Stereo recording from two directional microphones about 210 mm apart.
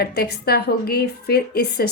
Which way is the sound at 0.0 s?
50° left (ahead or behind).